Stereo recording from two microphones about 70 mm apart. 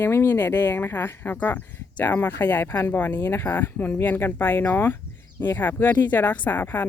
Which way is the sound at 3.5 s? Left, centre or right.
Left.